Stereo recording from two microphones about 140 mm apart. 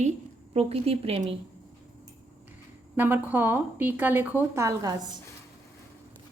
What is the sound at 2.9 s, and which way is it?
A woman's voice, 15° right (ahead or behind).